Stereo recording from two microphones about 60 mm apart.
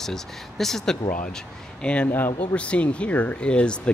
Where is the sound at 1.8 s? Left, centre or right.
Centre.